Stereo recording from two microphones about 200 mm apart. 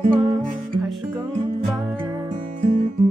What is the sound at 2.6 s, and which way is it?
Music, 40° right (ahead or behind).